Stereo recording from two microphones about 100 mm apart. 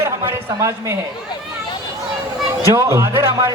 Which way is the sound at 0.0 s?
25° right (ahead or behind).